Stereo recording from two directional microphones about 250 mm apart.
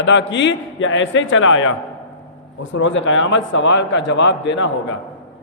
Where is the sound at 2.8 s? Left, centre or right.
Left.